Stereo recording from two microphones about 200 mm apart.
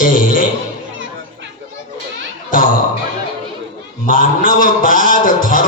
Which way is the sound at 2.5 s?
40° left (ahead or behind).